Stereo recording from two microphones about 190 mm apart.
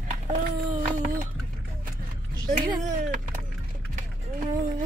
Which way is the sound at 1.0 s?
45° right (ahead or behind).